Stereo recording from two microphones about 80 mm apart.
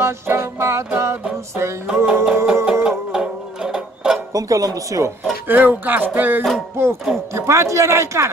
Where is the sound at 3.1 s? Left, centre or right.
Centre.